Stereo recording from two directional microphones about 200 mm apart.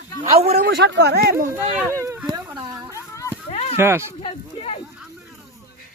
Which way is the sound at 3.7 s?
10° right (ahead or behind).